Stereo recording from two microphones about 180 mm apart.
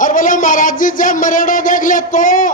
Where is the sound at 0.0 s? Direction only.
45° left (ahead or behind).